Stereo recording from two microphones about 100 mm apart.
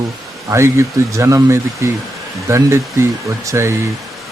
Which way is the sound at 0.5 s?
30° right (ahead or behind).